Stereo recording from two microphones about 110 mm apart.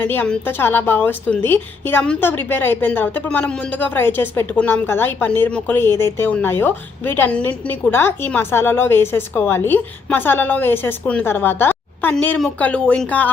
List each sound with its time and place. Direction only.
0.0 s a woman's voice: 20° left (ahead or behind)